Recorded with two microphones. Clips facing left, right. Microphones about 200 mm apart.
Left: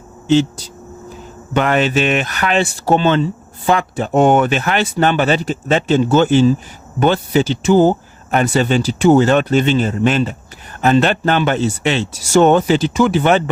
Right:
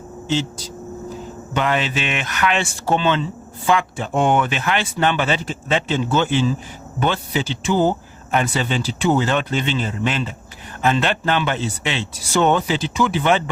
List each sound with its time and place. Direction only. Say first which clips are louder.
1.5 s speech: left 6 dB; 50° left (ahead or behind)